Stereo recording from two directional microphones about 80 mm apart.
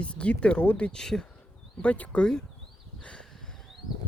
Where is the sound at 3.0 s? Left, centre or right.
Centre.